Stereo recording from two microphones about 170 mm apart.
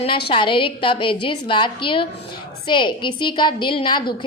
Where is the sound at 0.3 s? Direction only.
30° left (ahead or behind).